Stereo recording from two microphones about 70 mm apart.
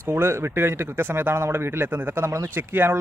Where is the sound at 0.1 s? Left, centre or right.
Right.